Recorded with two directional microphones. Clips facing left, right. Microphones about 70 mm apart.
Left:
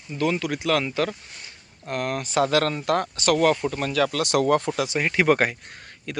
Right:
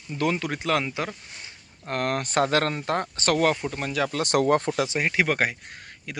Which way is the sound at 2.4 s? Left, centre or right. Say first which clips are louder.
Left 3 dB; right.